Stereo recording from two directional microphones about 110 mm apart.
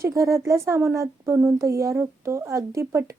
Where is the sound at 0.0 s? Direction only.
30° right (ahead or behind).